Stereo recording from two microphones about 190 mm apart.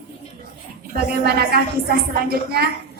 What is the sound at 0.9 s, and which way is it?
A woman's voice, 55° right (ahead or behind).